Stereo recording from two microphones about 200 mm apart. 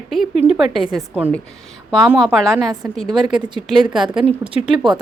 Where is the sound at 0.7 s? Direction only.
20° right (ahead or behind).